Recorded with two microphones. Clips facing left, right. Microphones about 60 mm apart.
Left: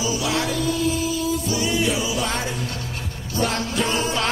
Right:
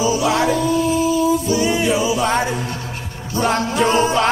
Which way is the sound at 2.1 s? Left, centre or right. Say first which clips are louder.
Right 7 dB; right.